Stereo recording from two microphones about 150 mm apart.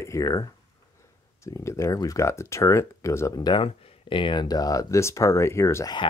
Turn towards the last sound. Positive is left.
turn(degrees=20)  # may be behind; listen again after turning